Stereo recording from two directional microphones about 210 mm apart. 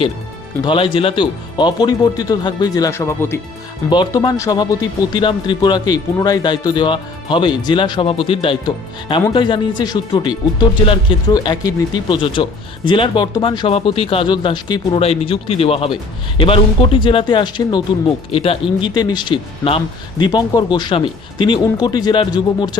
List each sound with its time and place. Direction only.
0.6 s a man's voice: 25° left (ahead or behind)